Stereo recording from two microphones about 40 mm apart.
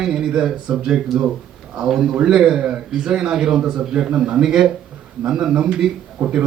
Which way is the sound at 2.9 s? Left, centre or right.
Centre.